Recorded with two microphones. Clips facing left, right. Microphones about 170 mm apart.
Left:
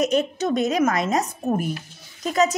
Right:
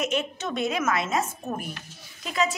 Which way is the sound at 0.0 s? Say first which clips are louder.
Left 7 dB; 40° left (ahead or behind).